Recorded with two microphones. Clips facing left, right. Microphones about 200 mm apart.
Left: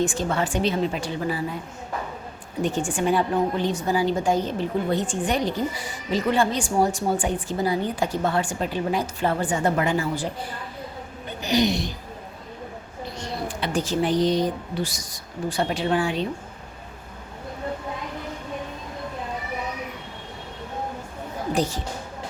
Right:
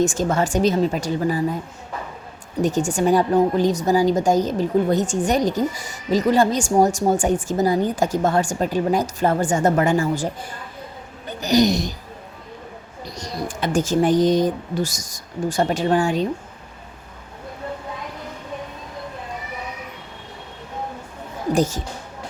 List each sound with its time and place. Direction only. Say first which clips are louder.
0.0 s a woman's voice: right 4 dB; 45° right (ahead or behind)
2.6 s a woman's voice: right 4 dB; 40° right (ahead or behind)
11.3 s speech: right 5 dB; 40° right (ahead or behind)
13.1 s speech: right 2 dB; 40° right (ahead or behind)
21.5 s a woman's voice: right 5 dB; 45° right (ahead or behind)